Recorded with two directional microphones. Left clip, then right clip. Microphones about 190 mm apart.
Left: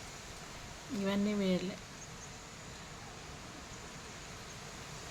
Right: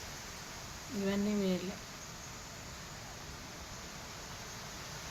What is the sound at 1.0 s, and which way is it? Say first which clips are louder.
Speech: even; 65° left (ahead or behind).